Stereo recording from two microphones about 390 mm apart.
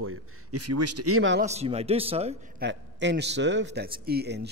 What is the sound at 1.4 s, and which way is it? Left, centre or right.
Speech, centre.